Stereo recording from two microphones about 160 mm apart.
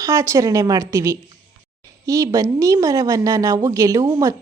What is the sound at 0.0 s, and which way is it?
A woman's voice, 20° right (ahead or behind).